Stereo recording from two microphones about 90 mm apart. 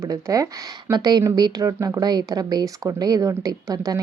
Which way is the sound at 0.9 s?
50° right (ahead or behind).